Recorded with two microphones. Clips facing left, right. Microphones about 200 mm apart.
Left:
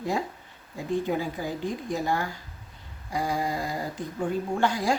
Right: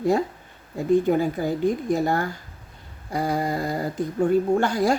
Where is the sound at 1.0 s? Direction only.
50° right (ahead or behind).